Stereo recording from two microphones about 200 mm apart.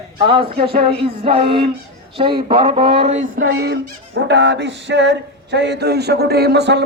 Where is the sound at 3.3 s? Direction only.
50° right (ahead or behind).